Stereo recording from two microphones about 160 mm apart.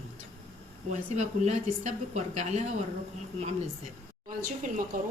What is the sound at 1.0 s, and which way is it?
A woman's voice, 45° right (ahead or behind).